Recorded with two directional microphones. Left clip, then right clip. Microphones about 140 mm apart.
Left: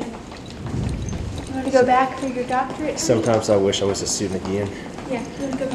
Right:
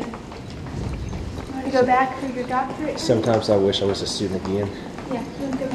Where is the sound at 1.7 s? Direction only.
35° left (ahead or behind).